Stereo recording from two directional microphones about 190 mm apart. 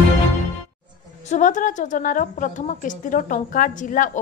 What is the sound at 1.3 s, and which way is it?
A woman's voice, 40° left (ahead or behind).